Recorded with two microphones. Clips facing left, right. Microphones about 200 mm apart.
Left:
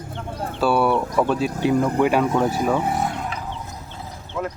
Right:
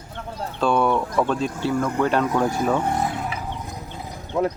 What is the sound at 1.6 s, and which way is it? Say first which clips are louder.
Speech: left 4 dB; 15° left (ahead or behind).